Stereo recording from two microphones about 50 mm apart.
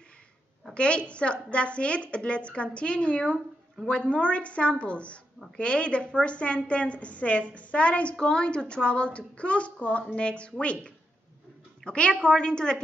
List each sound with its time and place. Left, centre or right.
0.7 s a woman's voice: left